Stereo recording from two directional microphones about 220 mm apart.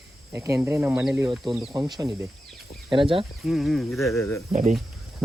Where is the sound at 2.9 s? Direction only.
25° right (ahead or behind).